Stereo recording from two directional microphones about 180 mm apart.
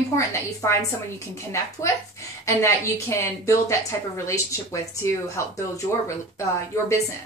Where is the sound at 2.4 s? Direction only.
15° left (ahead or behind).